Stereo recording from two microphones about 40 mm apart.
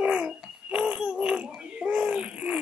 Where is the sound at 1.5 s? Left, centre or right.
Right.